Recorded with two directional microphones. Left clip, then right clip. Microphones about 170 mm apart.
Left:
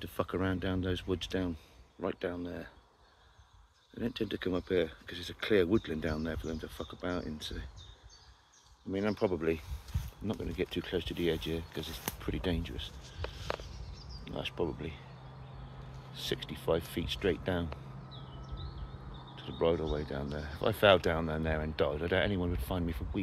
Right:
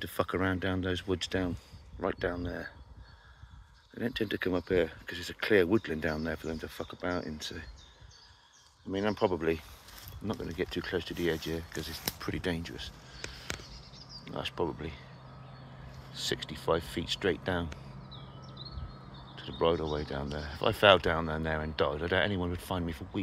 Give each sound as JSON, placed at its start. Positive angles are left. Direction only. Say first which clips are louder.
{"t": 0.0, "sound": "speech", "louder": "right 3 dB", "side_deg": 5}
{"t": 3.9, "sound": "speech", "louder": "right 3 dB", "side_deg": 0}
{"t": 8.9, "sound": "speech", "louder": "right 3 dB", "side_deg": 10}
{"t": 14.2, "sound": "speech", "louder": "right 2 dB", "side_deg": 5}
{"t": 16.1, "sound": "speech", "louder": "right 3 dB", "side_deg": 10}
{"t": 19.3, "sound": "speech", "louder": "right 2 dB", "side_deg": 10}